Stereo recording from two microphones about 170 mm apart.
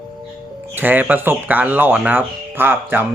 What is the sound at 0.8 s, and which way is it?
Speech, 10° right (ahead or behind).